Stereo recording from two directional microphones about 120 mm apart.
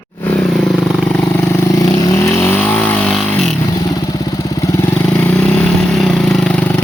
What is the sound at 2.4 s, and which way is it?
Vehicle, 15° left (ahead or behind).